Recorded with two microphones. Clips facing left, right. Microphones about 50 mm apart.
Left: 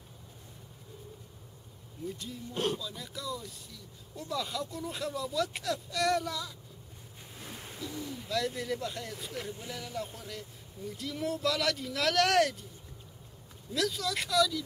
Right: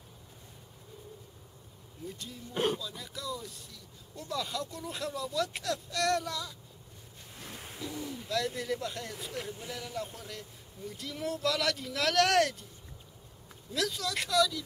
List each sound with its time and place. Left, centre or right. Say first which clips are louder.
2.0 s speech: left 3 dB; centre
2.5 s speech: right 2 dB; centre
2.8 s speech: left 1 dB; centre
13.7 s speech: left 1 dB; centre